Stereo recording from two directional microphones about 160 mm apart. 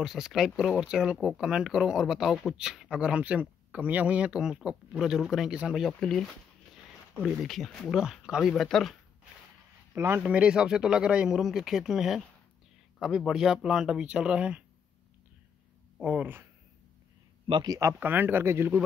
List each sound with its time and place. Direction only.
0.0 s speech: centre (ahead or behind)
9.9 s speech: 15° right (ahead or behind)
16.0 s speech: 5° right (ahead or behind)
17.5 s speech: 25° right (ahead or behind)